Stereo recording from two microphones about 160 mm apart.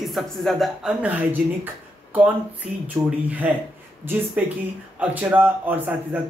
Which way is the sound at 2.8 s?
10° right (ahead or behind).